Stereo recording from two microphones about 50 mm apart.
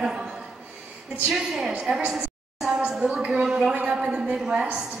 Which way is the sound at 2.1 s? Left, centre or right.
Centre.